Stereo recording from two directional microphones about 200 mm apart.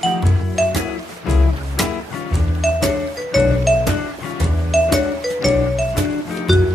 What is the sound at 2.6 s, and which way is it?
Music, centre (ahead or behind).